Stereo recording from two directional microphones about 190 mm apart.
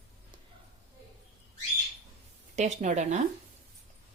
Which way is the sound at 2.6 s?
40° right (ahead or behind).